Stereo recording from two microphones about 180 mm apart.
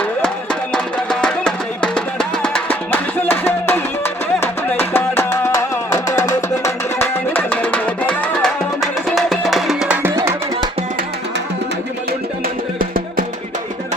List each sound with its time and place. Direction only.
0.7 s music: 5° left (ahead or behind); by 10.7 s 15° right (ahead or behind)
12.8 s music: 50° right (ahead or behind)